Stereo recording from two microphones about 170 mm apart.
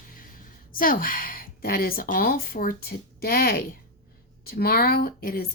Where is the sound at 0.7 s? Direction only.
55° left (ahead or behind).